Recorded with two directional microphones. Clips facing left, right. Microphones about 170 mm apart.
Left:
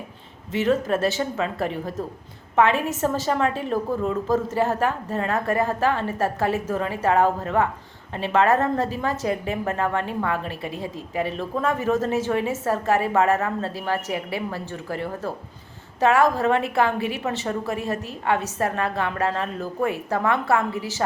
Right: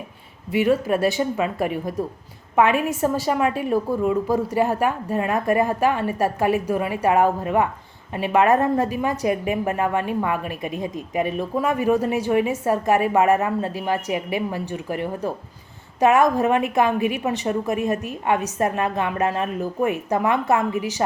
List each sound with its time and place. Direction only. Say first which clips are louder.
0.5 s a woman's voice: right 2 dB; 10° right (ahead or behind)